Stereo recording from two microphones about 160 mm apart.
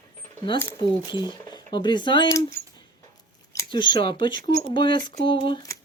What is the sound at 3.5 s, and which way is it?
Speech, 25° left (ahead or behind).